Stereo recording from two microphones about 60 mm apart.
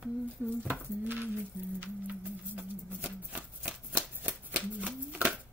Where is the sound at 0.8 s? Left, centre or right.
Right.